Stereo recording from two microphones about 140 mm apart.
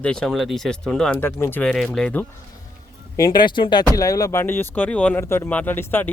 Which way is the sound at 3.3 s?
35° left (ahead or behind).